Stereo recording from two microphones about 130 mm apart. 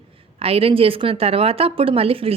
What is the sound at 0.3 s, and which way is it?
A woman's voice, 50° right (ahead or behind).